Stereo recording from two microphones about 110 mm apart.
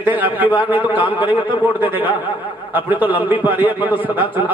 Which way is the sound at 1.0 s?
50° left (ahead or behind).